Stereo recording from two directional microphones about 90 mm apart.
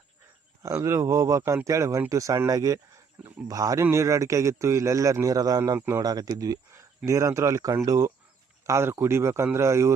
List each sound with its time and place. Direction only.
0.6 s a man's voice: 35° right (ahead or behind)
3.2 s speech: 10° right (ahead or behind)
3.5 s a man's voice: 40° right (ahead or behind)
5.7 s speech: 30° right (ahead or behind)
6.0 s a man's voice: 45° right (ahead or behind)